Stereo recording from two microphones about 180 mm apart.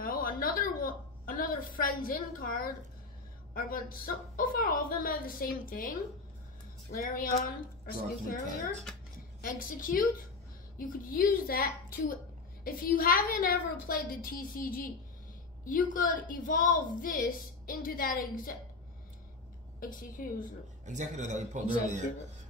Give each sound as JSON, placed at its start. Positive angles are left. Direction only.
{"t": 0.0, "sound": "a sound", "side_deg": 50}
{"t": 3.5, "sound": "a woman's voice", "side_deg": 50}
{"t": 9.4, "sound": "a woman's voice", "side_deg": 50}
{"t": 19.8, "sound": "a woman's voice", "side_deg": 50}
{"t": 20.8, "sound": "a man's voice", "side_deg": -40}